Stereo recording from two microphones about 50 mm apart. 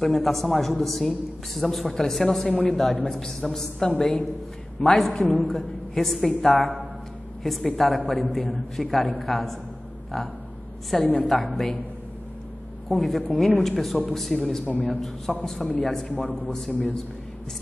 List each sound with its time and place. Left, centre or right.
0.0 s a man's voice: centre
12.8 s a man's voice: centre
14.7 s a man's voice: left
15.4 s a man's voice: centre